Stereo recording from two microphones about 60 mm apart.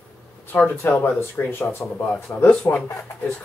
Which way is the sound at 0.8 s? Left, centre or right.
Left.